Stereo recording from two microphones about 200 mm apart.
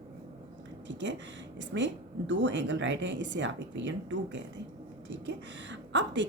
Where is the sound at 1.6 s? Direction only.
65° right (ahead or behind).